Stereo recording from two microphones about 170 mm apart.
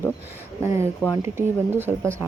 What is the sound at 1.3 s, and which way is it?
Speech, 15° right (ahead or behind).